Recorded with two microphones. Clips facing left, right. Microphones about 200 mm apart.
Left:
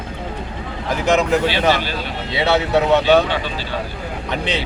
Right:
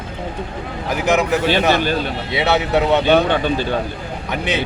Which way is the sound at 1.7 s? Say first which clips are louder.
Right 6 dB; 50° right (ahead or behind).